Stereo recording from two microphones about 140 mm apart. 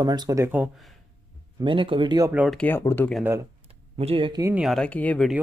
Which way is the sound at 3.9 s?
40° right (ahead or behind).